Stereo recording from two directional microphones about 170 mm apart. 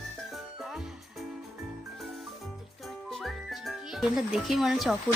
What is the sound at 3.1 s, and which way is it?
Whistling, centre (ahead or behind).